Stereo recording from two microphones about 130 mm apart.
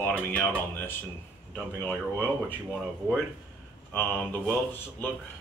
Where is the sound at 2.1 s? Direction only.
15° left (ahead or behind).